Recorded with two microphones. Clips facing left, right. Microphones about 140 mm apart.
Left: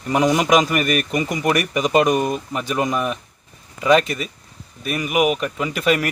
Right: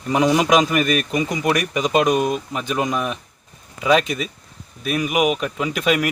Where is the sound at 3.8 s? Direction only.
10° right (ahead or behind).